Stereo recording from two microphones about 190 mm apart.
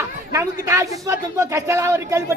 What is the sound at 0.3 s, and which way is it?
Speech, 15° right (ahead or behind).